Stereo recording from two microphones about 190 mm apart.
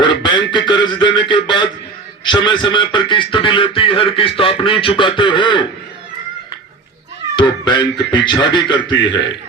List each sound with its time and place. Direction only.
0.0 s beatboxing: 25° left (ahead or behind)
1.3 s a sound: 25° left (ahead or behind)
2.2 s a man's voice: 25° left (ahead or behind)
7.3 s a man's voice: 25° left (ahead or behind)